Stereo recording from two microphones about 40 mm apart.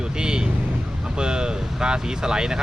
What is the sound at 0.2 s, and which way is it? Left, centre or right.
Vehicle, centre.